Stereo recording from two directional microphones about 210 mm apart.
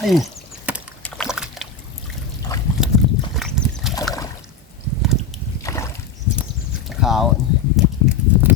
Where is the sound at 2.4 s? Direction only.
15° left (ahead or behind).